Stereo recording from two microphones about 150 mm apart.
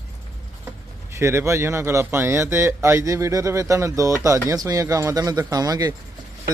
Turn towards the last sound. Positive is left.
turn(degrees=-25)  # may be behind; listen again after turning